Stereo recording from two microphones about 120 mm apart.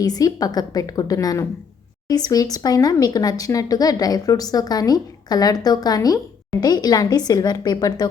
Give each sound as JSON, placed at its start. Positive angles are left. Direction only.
{"t": 0.0, "sound": "speech", "side_deg": 30}